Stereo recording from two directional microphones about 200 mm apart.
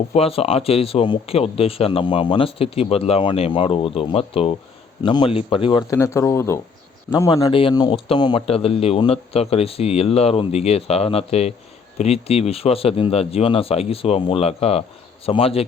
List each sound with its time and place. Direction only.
0.1 s speech: 30° left (ahead or behind)
5.9 s speech: 15° left (ahead or behind)